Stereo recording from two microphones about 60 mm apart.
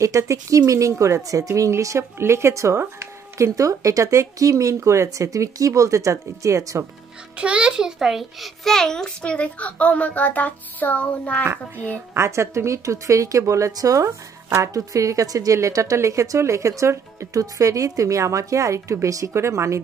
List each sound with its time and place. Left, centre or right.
0.0 s a woman's voice: right
1.5 s a woman's voice: right
2.1 s a woman's voice: right
2.8 s a sound: right
3.5 s a woman's voice: right
7.3 s a child's voice: centre
8.6 s a woman's voice: centre
11.4 s speech: right
12.1 s a woman's voice: right
17.3 s a woman's voice: right
19.3 s a woman's voice: right